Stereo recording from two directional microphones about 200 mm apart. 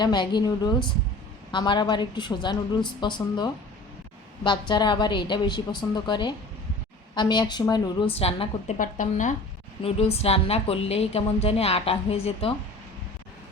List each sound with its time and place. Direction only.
0.0 s a woman's voice: 20° left (ahead or behind)
4.7 s a woman's voice: 20° left (ahead or behind)
8.8 s a woman's voice: 40° left (ahead or behind)